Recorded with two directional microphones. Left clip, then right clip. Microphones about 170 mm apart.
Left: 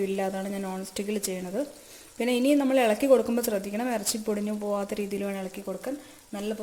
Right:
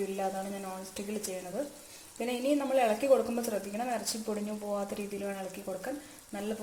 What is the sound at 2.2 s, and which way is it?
Speech, 45° left (ahead or behind).